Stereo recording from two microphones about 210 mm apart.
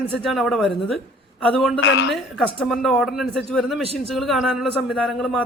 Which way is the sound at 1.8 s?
55° left (ahead or behind).